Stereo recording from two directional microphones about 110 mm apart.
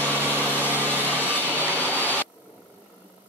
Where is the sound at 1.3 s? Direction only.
15° right (ahead or behind).